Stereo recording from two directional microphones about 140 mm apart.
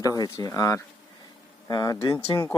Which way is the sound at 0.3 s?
25° left (ahead or behind).